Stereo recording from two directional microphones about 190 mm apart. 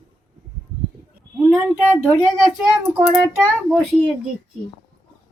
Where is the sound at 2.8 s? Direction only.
10° right (ahead or behind).